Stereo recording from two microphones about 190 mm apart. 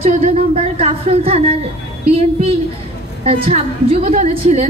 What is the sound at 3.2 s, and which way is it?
A woman's voice, 30° right (ahead or behind).